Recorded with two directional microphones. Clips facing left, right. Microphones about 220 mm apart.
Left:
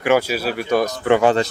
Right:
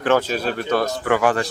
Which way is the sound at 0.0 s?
10° left (ahead or behind).